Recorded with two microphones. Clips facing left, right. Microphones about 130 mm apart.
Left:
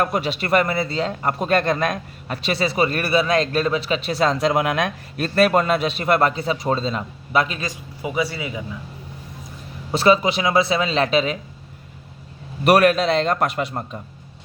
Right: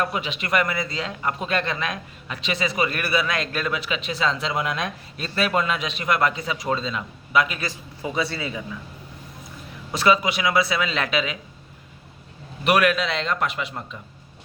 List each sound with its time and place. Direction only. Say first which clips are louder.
0.0 s a man's voice: left 5 dB; 40° left (ahead or behind)
7.6 s a man's voice: left 2 dB; 15° left (ahead or behind)
9.9 s a man's voice: left 4 dB; 30° left (ahead or behind)
12.6 s a man's voice: left 5 dB; 40° left (ahead or behind)